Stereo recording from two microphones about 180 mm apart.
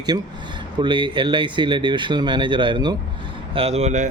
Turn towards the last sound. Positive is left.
turn(degrees=-40)  # may be behind; listen again after turning